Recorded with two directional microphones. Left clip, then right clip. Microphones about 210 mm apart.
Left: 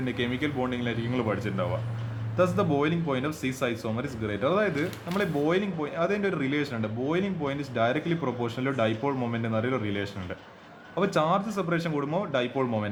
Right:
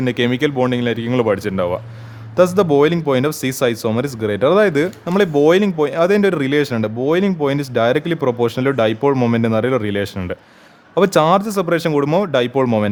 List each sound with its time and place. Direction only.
0.0 s speech: 50° right (ahead or behind)